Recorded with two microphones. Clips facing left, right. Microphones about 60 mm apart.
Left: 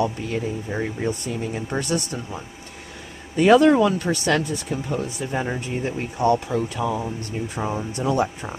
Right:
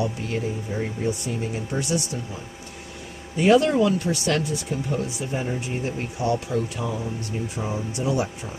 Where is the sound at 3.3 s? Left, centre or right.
Left.